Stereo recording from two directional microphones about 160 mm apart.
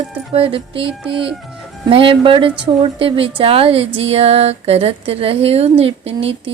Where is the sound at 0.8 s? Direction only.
5° right (ahead or behind).